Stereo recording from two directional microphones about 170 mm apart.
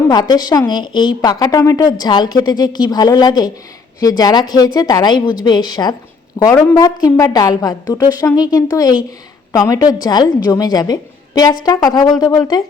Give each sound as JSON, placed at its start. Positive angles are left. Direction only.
{"t": 0.1, "sound": "a woman's voice", "side_deg": 25}
{"t": 6.4, "sound": "speech", "side_deg": 10}
{"t": 6.7, "sound": "a woman's voice", "side_deg": 20}